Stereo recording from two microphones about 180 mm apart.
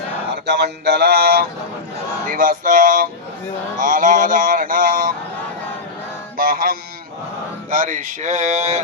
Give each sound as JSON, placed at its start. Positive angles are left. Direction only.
{"t": 0.4, "sound": "a sound", "side_deg": -70}
{"t": 2.2, "sound": "speech", "side_deg": -50}
{"t": 6.3, "sound": "mantra", "side_deg": -55}
{"t": 7.7, "sound": "speech", "side_deg": -45}